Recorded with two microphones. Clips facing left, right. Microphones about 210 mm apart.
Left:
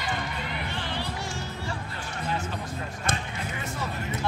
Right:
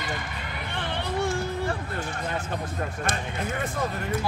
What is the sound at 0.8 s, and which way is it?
Music, 55° right (ahead or behind).